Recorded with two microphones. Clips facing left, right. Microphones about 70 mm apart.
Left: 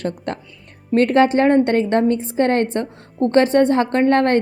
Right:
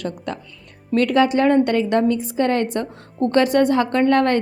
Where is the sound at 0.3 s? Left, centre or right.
Left.